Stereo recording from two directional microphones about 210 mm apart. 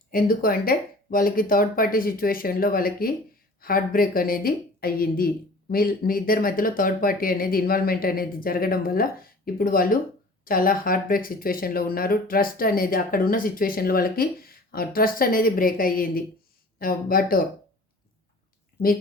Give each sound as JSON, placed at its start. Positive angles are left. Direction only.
{"t": 0.1, "sound": "a woman's voice", "side_deg": 45}